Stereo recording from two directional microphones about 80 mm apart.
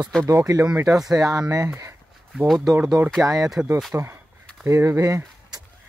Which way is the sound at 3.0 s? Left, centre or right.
Right.